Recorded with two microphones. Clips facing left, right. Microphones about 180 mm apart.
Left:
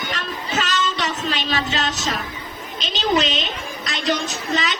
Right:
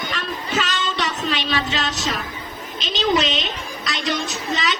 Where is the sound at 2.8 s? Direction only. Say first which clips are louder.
Right 2 dB; 40° right (ahead or behind).